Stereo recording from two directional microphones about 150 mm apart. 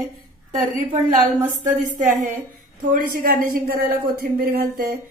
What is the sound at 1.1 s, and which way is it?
A woman's voice, 60° right (ahead or behind).